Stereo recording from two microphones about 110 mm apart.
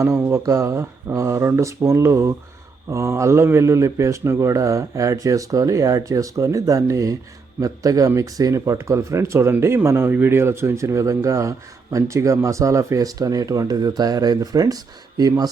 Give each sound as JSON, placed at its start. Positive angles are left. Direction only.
{"t": 0.0, "sound": "speech", "side_deg": -25}